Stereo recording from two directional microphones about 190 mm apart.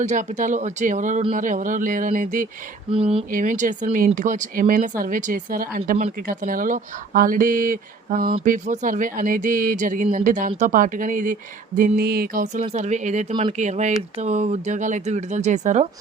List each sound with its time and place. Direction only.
0.0 s speech: 40° right (ahead or behind)
2.9 s speech: 30° right (ahead or behind)
3.3 s speech: 40° right (ahead or behind)